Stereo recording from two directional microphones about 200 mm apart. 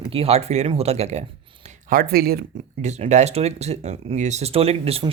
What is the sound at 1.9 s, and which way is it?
Speech, 50° right (ahead or behind).